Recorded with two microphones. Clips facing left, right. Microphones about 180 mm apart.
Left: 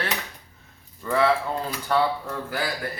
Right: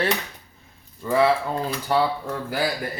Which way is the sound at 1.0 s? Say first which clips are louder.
Right 2 dB; 15° right (ahead or behind).